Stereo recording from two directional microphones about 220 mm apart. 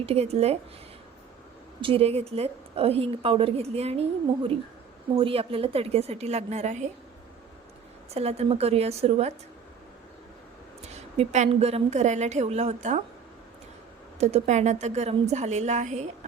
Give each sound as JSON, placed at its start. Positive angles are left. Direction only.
{"t": 0.0, "sound": "a woman's voice", "side_deg": -30}
{"t": 1.8, "sound": "a woman's voice", "side_deg": -25}
{"t": 5.1, "sound": "a woman's voice", "side_deg": -25}
{"t": 8.1, "sound": "a woman's voice", "side_deg": -30}
{"t": 10.9, "sound": "a woman's voice", "side_deg": -30}
{"t": 14.2, "sound": "a woman's voice", "side_deg": -30}